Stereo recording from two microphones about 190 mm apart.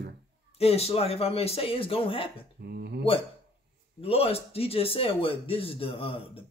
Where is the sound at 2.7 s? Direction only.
60° right (ahead or behind).